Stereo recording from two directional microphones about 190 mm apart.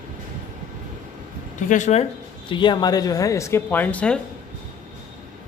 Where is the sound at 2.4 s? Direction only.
25° left (ahead or behind); by 4.1 s 5° left (ahead or behind).